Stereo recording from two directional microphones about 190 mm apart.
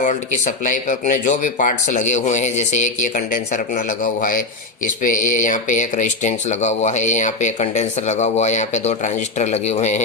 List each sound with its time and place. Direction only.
0.0 s a man's voice: 40° left (ahead or behind)